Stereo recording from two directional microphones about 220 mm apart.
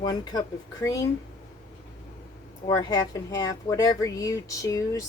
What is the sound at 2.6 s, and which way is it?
Speech, 20° left (ahead or behind).